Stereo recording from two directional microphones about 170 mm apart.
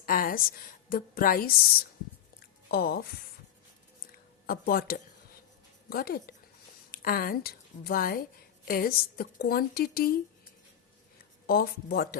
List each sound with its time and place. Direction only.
0.0 s a woman's voice: 60° left (ahead or behind)
2.6 s speech: 60° left (ahead or behind)
4.4 s a woman's voice: 60° left (ahead or behind)
11.4 s a woman's voice: 60° left (ahead or behind)